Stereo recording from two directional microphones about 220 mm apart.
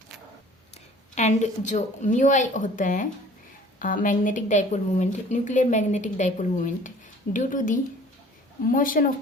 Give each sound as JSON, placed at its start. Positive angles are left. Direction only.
{"t": 1.1, "sound": "a woman's voice", "side_deg": 35}